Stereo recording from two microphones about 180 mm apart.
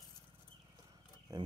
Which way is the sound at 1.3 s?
15° right (ahead or behind).